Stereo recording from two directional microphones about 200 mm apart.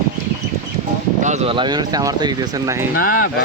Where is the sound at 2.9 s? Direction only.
45° left (ahead or behind).